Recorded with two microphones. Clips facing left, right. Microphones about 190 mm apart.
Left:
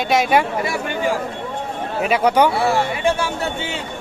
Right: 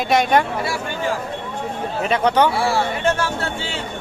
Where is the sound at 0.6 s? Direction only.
20° left (ahead or behind).